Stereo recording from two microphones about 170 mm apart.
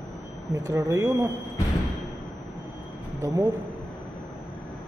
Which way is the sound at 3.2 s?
20° right (ahead or behind).